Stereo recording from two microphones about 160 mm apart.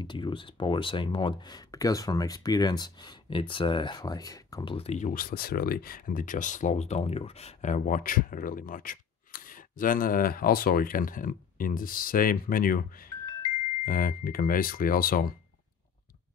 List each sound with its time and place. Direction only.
0.0 s speech: 30° left (ahead or behind)
4.7 s speech: 45° left (ahead or behind); by 12.8 s 60° left (ahead or behind)
13.8 s speech: 65° left (ahead or behind)